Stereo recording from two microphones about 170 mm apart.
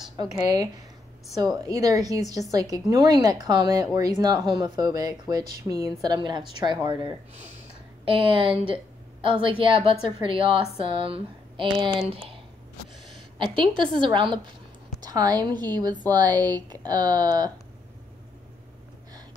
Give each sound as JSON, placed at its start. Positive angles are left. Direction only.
{"t": 0.2, "sound": "a woman's voice", "side_deg": -20}
{"t": 8.0, "sound": "speech", "side_deg": -30}
{"t": 13.4, "sound": "a woman's voice", "side_deg": -30}
{"t": 16.3, "sound": "speech", "side_deg": 10}
{"t": 16.8, "sound": "a woman's voice", "side_deg": -25}